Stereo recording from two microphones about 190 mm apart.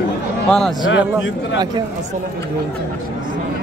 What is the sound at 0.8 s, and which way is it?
Speech, 75° left (ahead or behind).